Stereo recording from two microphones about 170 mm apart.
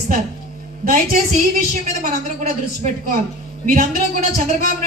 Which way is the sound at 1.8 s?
55° right (ahead or behind).